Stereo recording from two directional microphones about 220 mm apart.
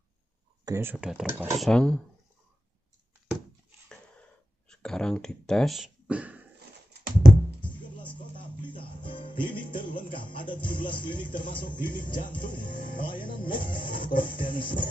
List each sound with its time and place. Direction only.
0.7 s speech: 10° right (ahead or behind)
4.6 s speech: 5° left (ahead or behind)
8.2 s music: 20° left (ahead or behind)
9.7 s speech: 20° left (ahead or behind)